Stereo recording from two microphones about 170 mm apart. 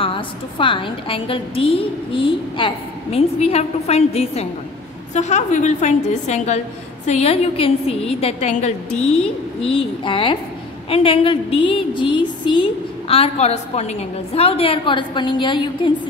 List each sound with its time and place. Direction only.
0.0 s a woman's voice: 30° left (ahead or behind)